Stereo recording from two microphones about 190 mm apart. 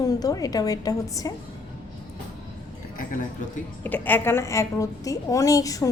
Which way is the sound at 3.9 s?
10° left (ahead or behind).